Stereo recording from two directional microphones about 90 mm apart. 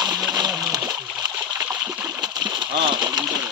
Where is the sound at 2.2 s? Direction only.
50° right (ahead or behind).